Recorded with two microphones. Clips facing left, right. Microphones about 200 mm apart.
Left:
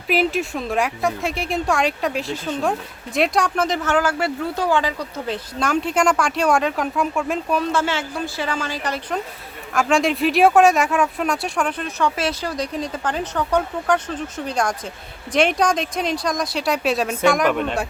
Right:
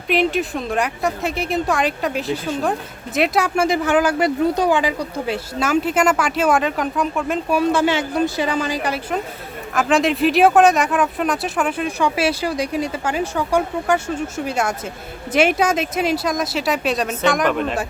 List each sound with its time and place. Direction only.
0.1 s speech: centre (ahead or behind)
7.7 s speech: 15° right (ahead or behind)